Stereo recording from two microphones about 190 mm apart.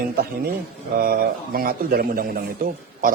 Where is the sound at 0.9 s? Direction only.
50° right (ahead or behind).